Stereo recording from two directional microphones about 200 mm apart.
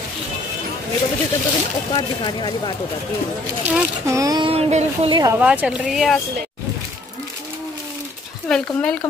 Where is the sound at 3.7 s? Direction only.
10° right (ahead or behind).